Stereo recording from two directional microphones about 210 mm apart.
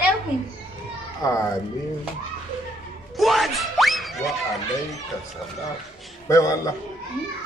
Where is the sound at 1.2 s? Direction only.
15° left (ahead or behind).